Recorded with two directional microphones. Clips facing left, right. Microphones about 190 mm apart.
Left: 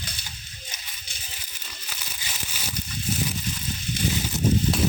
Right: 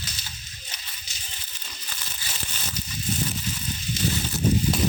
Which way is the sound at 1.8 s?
10° left (ahead or behind).